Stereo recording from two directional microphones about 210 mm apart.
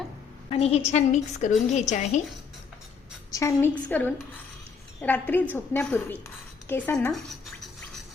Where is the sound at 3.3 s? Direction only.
10° left (ahead or behind).